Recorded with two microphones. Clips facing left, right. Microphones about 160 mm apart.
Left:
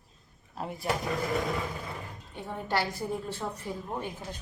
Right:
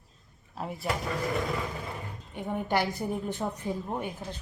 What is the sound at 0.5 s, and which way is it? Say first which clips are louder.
Speech: right 1 dB; centre (ahead or behind).